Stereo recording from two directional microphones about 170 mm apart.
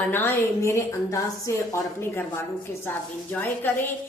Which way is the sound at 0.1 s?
15° left (ahead or behind).